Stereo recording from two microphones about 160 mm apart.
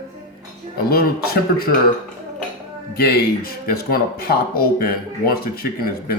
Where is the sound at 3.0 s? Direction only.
75° left (ahead or behind).